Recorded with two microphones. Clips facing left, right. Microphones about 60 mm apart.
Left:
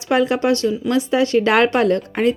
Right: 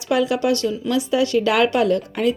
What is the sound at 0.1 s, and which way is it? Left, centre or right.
A woman's voice, left.